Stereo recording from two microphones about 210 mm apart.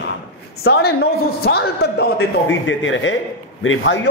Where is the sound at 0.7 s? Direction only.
50° left (ahead or behind).